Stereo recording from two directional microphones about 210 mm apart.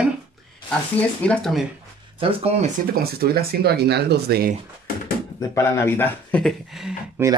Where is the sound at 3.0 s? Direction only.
45° right (ahead or behind).